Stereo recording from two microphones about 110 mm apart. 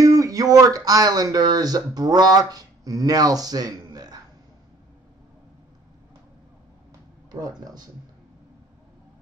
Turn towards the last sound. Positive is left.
turn(degrees=-35)  # may be behind; listen again after turning